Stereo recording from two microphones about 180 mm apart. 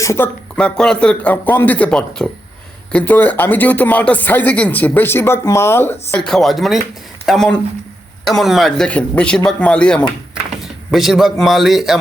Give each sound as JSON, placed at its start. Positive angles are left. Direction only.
{"t": 0.0, "sound": "speech", "side_deg": 15}
{"t": 0.5, "sound": "a man's voice", "side_deg": 5}